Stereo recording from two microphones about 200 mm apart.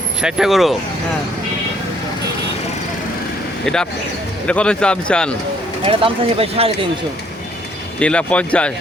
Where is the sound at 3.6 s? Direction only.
5° left (ahead or behind).